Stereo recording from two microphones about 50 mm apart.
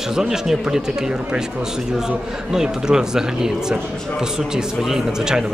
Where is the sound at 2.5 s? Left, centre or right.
Centre.